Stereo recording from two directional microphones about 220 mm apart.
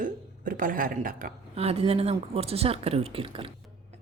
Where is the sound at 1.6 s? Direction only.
25° right (ahead or behind).